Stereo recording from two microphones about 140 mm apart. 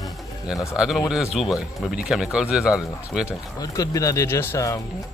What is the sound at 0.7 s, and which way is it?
Speech, centre (ahead or behind).